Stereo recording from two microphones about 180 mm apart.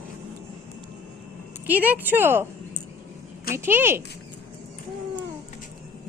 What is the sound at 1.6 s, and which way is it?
Speech, 10° right (ahead or behind).